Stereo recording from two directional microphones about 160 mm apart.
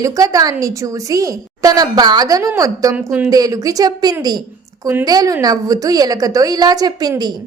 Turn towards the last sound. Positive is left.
turn(degrees=-25)  # may be behind; listen again after turning